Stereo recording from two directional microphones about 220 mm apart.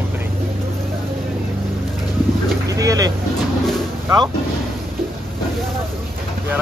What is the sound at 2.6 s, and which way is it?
Speech, 15° right (ahead or behind).